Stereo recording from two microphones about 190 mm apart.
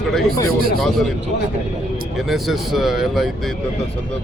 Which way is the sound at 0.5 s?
50° right (ahead or behind).